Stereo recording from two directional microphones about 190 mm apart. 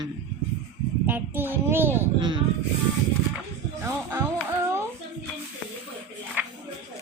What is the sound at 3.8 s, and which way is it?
Speech, 15° right (ahead or behind).